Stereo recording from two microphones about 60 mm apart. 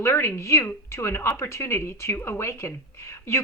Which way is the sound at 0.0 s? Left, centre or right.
Left.